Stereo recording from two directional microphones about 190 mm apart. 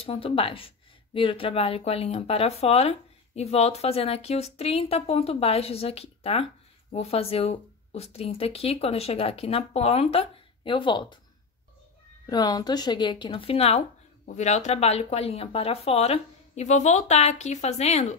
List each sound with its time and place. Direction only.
0.0 s speech: 30° left (ahead or behind)
12.3 s speech: 20° left (ahead or behind)